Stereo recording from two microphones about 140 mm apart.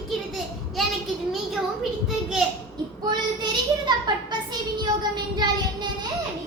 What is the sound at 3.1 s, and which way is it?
Child singing, 30° right (ahead or behind).